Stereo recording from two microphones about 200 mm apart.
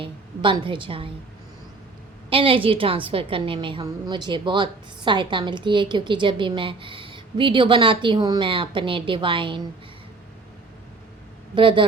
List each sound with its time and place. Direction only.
0.0 s a woman's voice: 25° right (ahead or behind)
2.3 s a woman's voice: 25° right (ahead or behind)
11.5 s a woman's voice: 25° right (ahead or behind)